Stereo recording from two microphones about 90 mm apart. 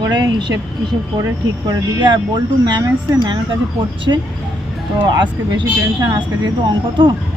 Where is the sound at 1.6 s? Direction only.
55° right (ahead or behind).